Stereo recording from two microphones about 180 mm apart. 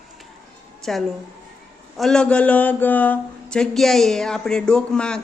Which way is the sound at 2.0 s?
5° left (ahead or behind).